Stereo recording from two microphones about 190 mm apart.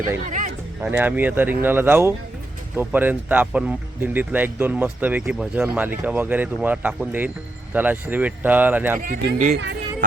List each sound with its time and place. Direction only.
0.3 s a sound: 40° right (ahead or behind)
0.8 s speech: 10° right (ahead or behind)
9.0 s speech: 45° right (ahead or behind)